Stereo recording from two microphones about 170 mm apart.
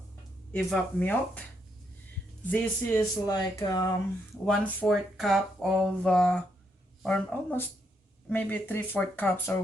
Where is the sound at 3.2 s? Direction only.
25° left (ahead or behind).